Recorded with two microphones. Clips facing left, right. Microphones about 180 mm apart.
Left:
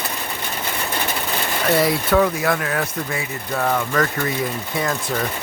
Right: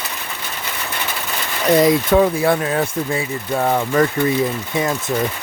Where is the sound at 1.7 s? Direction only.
20° right (ahead or behind).